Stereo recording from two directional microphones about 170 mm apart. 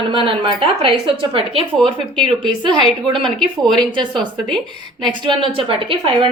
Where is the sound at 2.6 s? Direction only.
25° right (ahead or behind).